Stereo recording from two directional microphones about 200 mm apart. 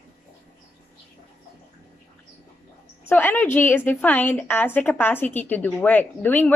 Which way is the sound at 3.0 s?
10° left (ahead or behind).